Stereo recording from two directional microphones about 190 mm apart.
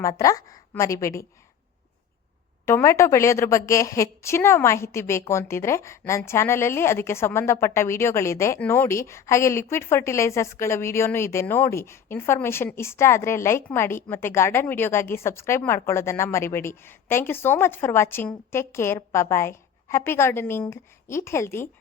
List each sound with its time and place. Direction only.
0.0 s a woman's voice: 15° left (ahead or behind)
2.6 s a woman's voice: 15° left (ahead or behind)